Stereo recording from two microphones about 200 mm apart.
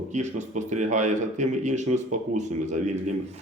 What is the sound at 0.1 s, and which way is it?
Speech, 35° right (ahead or behind).